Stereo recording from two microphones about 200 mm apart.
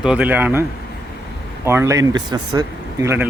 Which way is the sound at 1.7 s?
15° right (ahead or behind).